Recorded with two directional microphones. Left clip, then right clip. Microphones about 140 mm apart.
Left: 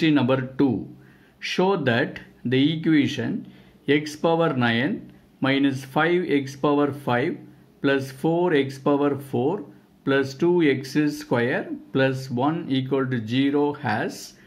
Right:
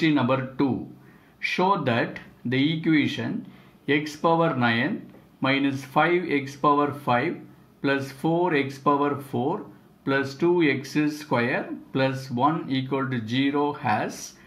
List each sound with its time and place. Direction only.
0.0 s speech: 45° left (ahead or behind)